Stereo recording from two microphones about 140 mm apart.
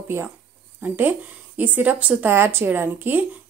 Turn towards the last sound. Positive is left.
turn(degrees=-15)  # may be behind; listen again after turning